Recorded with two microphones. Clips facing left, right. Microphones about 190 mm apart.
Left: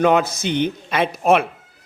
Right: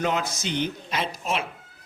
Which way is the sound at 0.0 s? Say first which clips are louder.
Left 10 dB; 60° left (ahead or behind).